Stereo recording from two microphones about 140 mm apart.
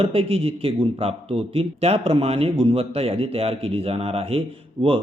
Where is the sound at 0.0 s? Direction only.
45° right (ahead or behind).